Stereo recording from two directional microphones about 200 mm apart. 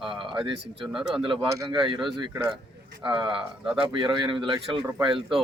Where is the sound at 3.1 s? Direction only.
25° right (ahead or behind).